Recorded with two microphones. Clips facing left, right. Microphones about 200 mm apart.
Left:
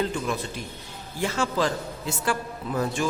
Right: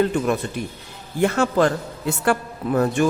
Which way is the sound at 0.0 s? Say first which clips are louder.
Right 7 dB; 55° right (ahead or behind).